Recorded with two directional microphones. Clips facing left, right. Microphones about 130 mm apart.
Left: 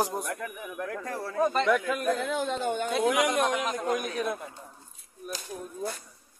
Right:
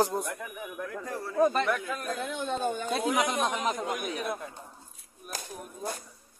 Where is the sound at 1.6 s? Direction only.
90° left.